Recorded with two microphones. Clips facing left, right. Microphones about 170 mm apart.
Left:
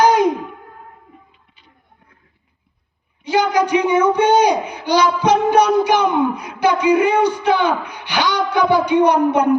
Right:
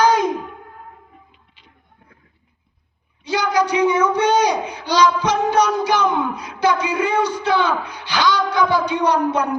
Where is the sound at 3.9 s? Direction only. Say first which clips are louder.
Left 3 dB; 30° left (ahead or behind).